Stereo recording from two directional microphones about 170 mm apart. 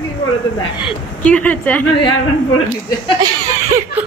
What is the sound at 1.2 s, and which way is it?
Speech, 10° left (ahead or behind).